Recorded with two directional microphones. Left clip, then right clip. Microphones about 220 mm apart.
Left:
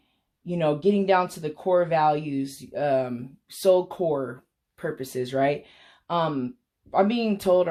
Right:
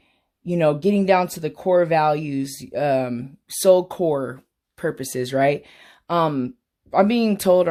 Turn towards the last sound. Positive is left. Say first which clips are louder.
# right 4 dB
turn(degrees=-45)  # may be behind; listen again after turning